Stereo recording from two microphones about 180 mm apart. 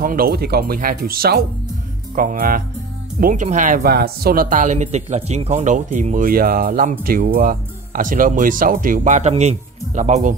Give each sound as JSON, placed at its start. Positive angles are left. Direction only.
{"t": 0.0, "sound": "speech", "side_deg": -50}